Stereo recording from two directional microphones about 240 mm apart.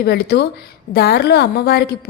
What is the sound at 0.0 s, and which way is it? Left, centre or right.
A woman's voice, left.